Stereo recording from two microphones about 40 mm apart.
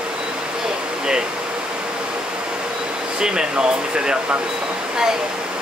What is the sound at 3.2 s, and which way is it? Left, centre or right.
Speech, centre.